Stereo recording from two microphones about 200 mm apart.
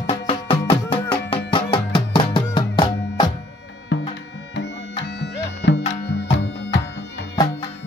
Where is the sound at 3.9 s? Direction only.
60° left (ahead or behind).